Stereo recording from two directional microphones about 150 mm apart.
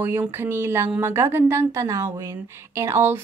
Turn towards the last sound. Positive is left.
turn(degrees=-15)  # may be behind; listen again after turning